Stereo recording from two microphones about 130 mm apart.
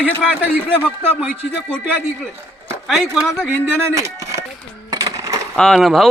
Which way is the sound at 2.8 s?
Centre (ahead or behind).